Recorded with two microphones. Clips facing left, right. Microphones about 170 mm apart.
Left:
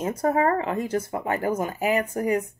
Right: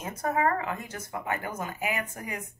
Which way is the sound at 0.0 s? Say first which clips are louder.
Left 6 dB; 30° left (ahead or behind).